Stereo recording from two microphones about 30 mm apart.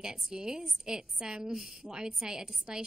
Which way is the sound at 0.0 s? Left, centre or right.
Right.